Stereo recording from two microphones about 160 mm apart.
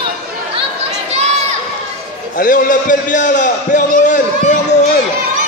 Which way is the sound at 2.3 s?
60° left (ahead or behind).